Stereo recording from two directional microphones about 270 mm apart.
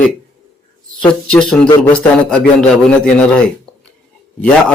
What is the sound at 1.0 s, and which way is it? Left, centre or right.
Speech, centre.